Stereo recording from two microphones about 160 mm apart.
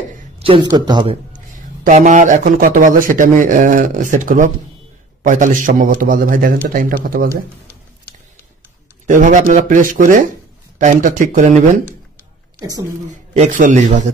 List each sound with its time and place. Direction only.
0.4 s a man's voice: 30° right (ahead or behind)
1.9 s speech: 50° right (ahead or behind)
9.0 s speech: 55° right (ahead or behind)
12.5 s a woman's voice: 25° right (ahead or behind)
13.3 s speech: 50° right (ahead or behind)